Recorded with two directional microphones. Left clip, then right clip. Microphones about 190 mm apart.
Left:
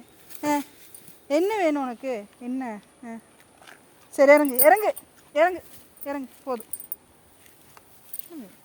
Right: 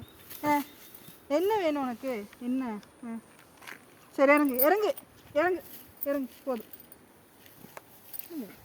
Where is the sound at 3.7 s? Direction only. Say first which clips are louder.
Right 4 dB; 50° right (ahead or behind).